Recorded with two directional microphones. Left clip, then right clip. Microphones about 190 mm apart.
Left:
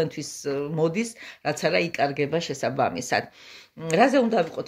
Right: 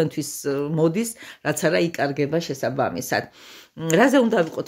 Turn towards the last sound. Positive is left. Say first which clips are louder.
# right 3 dB
turn(degrees=-50)  # may be behind; listen again after turning